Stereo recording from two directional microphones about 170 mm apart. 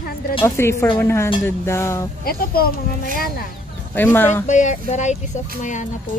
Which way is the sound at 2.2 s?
60° left (ahead or behind).